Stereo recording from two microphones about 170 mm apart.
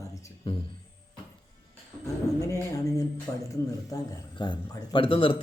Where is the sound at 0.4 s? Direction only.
35° left (ahead or behind).